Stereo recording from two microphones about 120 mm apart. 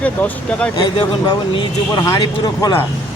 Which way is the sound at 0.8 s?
35° left (ahead or behind).